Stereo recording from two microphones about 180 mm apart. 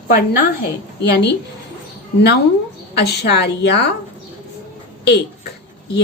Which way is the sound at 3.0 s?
65° left (ahead or behind).